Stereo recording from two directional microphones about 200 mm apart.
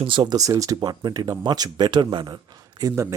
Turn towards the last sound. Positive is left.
turn(degrees=-20)  # may be behind; listen again after turning